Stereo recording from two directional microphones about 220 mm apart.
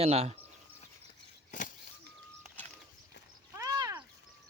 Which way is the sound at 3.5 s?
15° right (ahead or behind).